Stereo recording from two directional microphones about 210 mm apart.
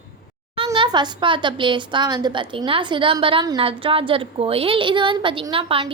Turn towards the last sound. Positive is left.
turn(degrees=-25)  # may be behind; listen again after turning